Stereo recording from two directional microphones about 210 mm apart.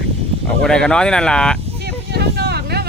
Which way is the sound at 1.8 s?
50° right (ahead or behind).